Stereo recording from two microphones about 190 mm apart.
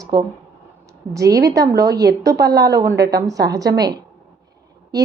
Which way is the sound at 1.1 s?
15° right (ahead or behind).